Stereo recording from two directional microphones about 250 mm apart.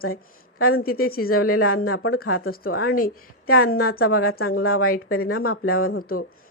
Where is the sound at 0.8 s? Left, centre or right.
Left.